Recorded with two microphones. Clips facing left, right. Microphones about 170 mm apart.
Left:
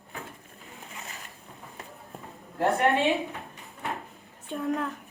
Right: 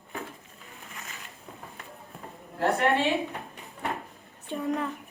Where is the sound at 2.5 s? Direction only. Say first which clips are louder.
Left 1 dB; 20° left (ahead or behind).